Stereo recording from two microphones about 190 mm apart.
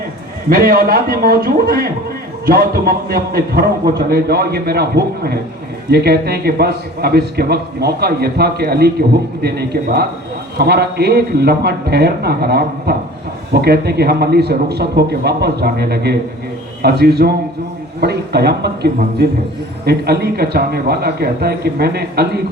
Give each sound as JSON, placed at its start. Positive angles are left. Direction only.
{"t": 0.5, "sound": "a man's voice", "side_deg": -50}